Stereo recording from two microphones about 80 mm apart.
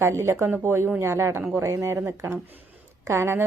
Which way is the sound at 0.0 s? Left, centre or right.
Right.